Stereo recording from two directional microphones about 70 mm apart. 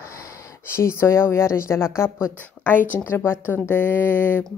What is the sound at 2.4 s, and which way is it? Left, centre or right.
Speech, left.